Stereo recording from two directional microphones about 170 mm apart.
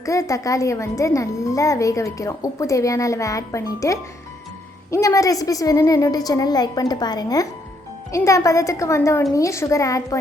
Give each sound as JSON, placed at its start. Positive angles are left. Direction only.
{"t": 0.0, "sound": "a woman's voice", "side_deg": 20}